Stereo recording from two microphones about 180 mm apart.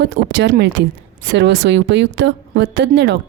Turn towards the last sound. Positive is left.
turn(degrees=-75)  # may be behind; listen again after turning